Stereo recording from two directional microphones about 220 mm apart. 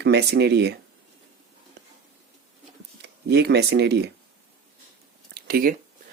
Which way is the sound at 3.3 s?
50° right (ahead or behind).